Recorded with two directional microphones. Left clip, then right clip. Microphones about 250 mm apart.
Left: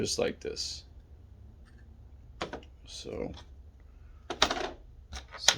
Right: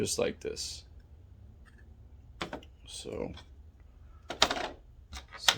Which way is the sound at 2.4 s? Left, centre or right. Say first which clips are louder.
Left 1 dB; centre.